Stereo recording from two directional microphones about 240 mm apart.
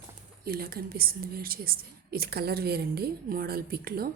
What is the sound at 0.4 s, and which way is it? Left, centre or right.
Speech, right.